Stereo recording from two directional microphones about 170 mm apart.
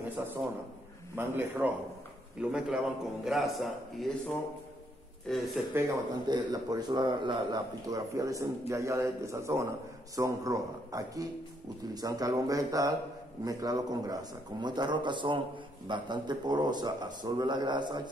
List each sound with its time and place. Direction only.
0.2 s a man's voice: 15° right (ahead or behind)
5.3 s a man's voice: centre (ahead or behind)
5.8 s a man's voice: 20° right (ahead or behind)